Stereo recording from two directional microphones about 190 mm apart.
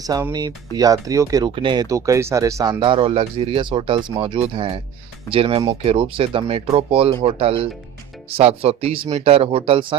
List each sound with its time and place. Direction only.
0.0 s speech: 20° right (ahead or behind)